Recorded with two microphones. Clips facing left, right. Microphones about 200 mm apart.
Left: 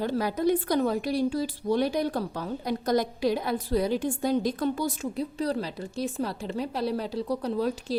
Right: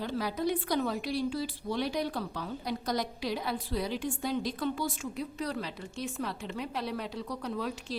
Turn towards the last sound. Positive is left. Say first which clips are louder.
# left 8 dB
turn(degrees=35)  # may be behind; listen again after turning